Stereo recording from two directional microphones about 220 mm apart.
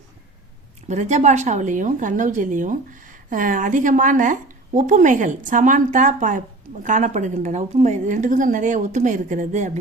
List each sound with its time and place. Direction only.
0.9 s a woman's voice: 30° right (ahead or behind)